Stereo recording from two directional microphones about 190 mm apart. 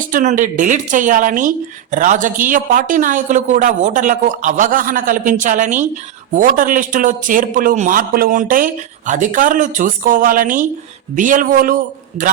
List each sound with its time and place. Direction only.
0.0 s a woman's voice: 45° right (ahead or behind)